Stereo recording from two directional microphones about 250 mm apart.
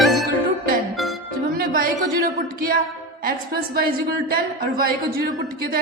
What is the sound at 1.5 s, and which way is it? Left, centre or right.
A woman's voice, right.